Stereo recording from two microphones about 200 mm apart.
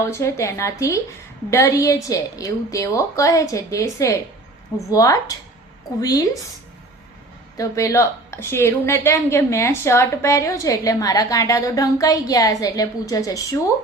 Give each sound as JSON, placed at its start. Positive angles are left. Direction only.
{"t": 0.0, "sound": "a woman's voice", "side_deg": 15}
{"t": 7.5, "sound": "a woman's voice", "side_deg": 15}